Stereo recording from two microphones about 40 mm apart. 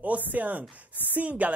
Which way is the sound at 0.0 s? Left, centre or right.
Right.